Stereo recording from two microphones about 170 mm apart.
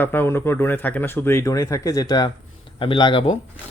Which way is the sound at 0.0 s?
10° left (ahead or behind).